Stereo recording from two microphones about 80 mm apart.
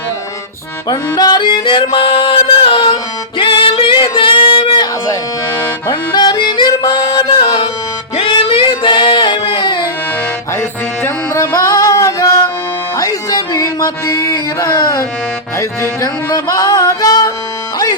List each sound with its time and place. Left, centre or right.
0.9 s music: left
1.4 s music: left
5.9 s music: left
8.3 s singing: left
10.6 s music: left
11.5 s music: left